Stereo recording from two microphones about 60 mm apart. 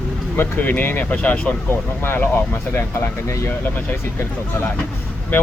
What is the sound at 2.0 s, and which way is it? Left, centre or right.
Speech, left.